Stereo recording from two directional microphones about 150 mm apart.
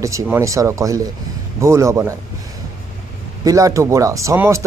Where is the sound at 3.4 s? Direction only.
20° right (ahead or behind).